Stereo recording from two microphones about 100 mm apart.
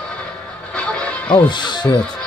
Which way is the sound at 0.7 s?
10° left (ahead or behind).